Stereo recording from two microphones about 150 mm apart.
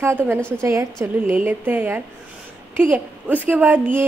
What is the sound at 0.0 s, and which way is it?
A woman's voice, 15° right (ahead or behind).